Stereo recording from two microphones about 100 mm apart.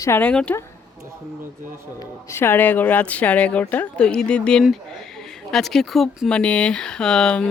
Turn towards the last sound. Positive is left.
turn(degrees=10)  # may be behind; listen again after turning